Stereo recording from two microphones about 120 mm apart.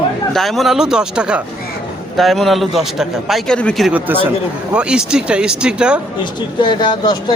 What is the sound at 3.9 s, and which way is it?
Speech, 15° right (ahead or behind).